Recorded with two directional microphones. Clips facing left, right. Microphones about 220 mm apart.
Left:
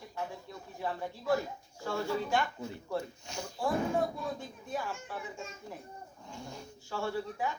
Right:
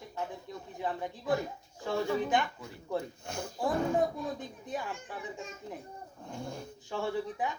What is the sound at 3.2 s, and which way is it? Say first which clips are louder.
Speech: right 3 dB; 55° right (ahead or behind).